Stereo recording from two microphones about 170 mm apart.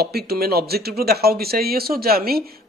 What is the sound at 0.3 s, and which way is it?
Speech, 65° right (ahead or behind).